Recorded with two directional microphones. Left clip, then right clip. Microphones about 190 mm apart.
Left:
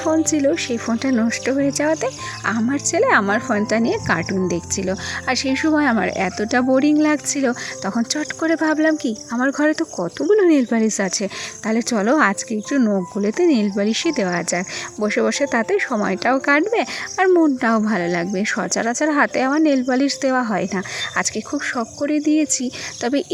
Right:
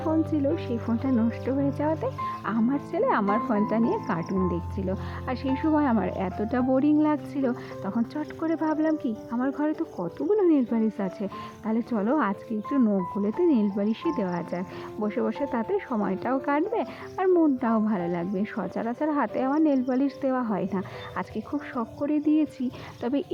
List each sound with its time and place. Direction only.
0.3 s speech: 25° left (ahead or behind)
9.3 s speech: 35° left (ahead or behind)
13.2 s speech: 25° left (ahead or behind)